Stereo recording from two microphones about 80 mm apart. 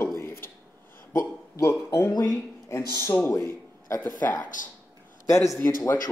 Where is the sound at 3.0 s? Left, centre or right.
Left.